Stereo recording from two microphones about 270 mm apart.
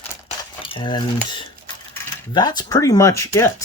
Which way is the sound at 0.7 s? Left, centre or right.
Centre.